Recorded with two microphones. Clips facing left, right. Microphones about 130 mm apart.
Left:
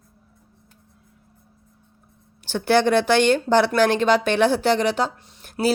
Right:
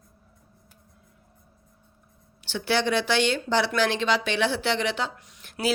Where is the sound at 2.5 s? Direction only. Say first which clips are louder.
Left 7 dB; 50° left (ahead or behind).